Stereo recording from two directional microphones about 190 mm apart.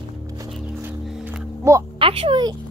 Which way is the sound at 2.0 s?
30° right (ahead or behind).